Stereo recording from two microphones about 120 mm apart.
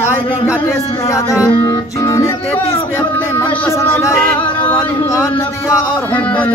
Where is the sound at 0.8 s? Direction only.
30° left (ahead or behind).